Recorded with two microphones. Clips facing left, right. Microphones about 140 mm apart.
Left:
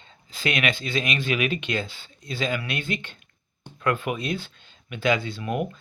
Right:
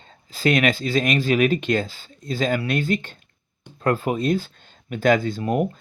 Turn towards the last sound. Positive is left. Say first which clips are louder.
# right 5 dB
turn(degrees=-40)  # may be behind; listen again after turning